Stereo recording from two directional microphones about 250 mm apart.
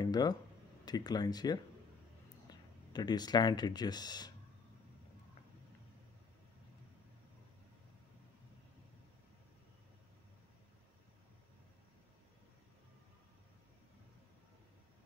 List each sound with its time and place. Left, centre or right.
0.0 s a sound: centre
0.8 s speech: centre
2.9 s speech: centre